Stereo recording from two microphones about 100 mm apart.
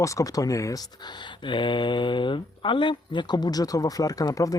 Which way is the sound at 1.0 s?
50° left (ahead or behind).